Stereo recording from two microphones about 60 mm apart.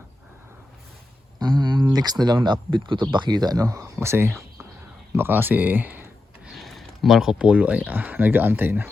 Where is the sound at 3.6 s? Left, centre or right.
Right.